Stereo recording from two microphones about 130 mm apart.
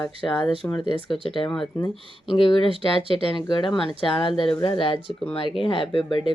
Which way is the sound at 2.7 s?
45° right (ahead or behind).